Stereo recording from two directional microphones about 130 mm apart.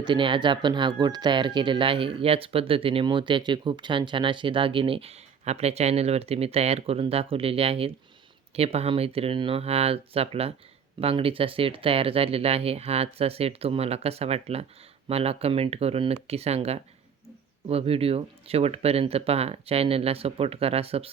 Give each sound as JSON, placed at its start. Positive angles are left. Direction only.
{"t": 0.0, "sound": "speech", "side_deg": -40}